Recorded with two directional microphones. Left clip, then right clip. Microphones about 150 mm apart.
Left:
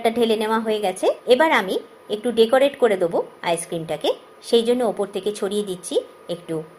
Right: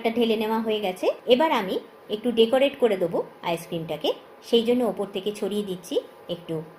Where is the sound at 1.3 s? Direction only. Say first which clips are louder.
Left 4 dB; 30° left (ahead or behind).